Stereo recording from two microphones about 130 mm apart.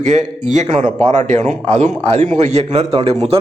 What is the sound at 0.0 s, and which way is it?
A man's voice, 65° right (ahead or behind).